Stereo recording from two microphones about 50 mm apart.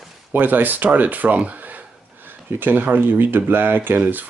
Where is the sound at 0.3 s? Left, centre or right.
Right.